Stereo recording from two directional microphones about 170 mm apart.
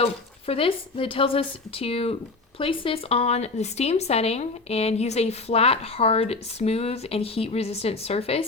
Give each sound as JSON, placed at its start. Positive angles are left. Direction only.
{"t": 0.0, "sound": "a woman's voice", "side_deg": 35}